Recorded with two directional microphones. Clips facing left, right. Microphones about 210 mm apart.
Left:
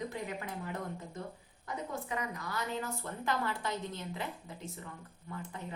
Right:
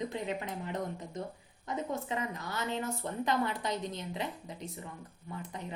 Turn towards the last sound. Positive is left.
turn(degrees=-15)  # may be behind; listen again after turning